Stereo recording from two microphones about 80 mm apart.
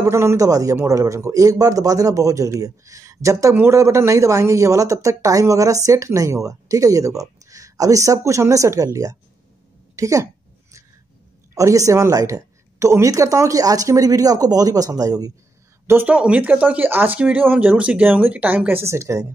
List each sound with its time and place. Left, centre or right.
0.0 s a woman's voice: right
11.5 s speech: right
16.1 s speech: centre; by 19.2 s right